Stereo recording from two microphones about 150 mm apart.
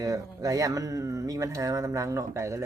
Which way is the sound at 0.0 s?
20° right (ahead or behind).